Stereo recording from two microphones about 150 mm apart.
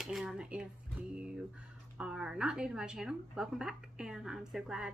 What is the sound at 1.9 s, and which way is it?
A woman's voice, 5° right (ahead or behind).